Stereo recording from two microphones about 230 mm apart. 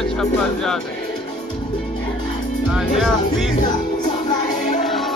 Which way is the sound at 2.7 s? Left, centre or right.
Centre.